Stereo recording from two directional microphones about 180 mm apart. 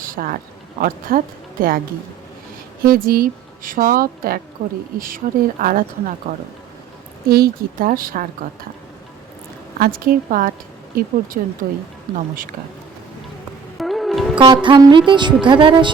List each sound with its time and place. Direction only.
0.0 s a sound: 50° right (ahead or behind)
0.8 s speech: 50° right (ahead or behind)
2.8 s speech: 55° right (ahead or behind)
9.7 s speech: 50° right (ahead or behind)
13.7 s music: centre (ahead or behind)
14.3 s music: 25° right (ahead or behind)